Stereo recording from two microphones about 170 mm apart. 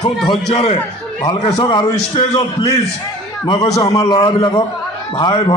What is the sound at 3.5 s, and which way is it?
A man's voice, 20° left (ahead or behind).